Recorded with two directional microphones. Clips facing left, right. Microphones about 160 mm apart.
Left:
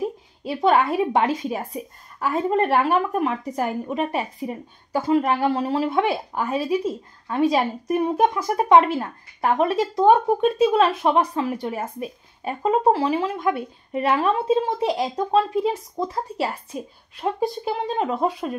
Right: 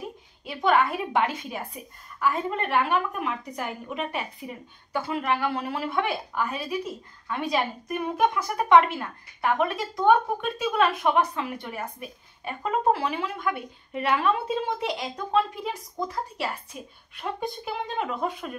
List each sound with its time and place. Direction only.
0.4 s a woman's voice: 35° left (ahead or behind)